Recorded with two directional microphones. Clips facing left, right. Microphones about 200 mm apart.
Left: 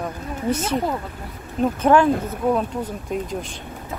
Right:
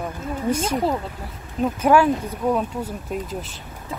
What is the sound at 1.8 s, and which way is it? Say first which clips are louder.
Speech: even; 10° right (ahead or behind).